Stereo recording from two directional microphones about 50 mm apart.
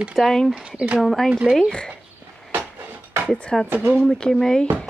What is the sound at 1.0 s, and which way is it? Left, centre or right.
Speech, centre.